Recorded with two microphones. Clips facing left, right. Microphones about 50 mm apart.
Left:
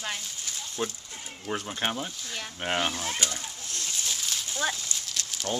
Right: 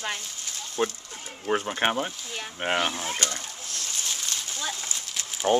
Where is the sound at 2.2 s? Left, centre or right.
Centre.